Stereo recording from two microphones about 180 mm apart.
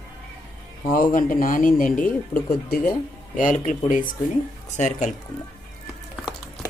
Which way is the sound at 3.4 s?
45° left (ahead or behind).